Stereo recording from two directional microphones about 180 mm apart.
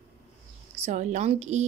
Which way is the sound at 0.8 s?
40° right (ahead or behind).